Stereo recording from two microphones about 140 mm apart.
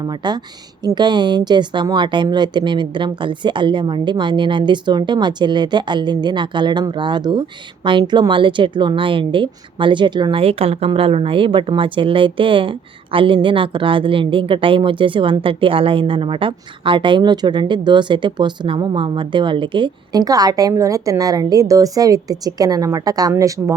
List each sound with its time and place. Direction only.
0.0 s a woman's voice: 30° right (ahead or behind)